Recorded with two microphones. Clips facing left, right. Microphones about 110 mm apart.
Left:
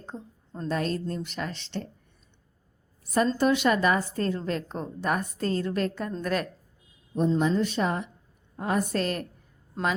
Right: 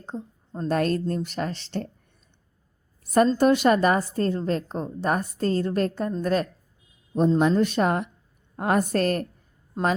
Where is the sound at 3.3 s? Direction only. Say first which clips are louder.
Right 4 dB; 45° right (ahead or behind).